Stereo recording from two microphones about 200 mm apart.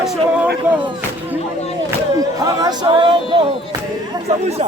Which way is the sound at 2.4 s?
20° right (ahead or behind).